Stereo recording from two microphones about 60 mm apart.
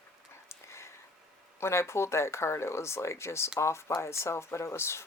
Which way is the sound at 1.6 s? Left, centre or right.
Left.